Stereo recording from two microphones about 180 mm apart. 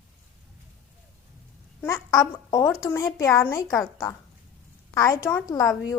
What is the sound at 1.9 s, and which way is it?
A woman's voice, 20° left (ahead or behind).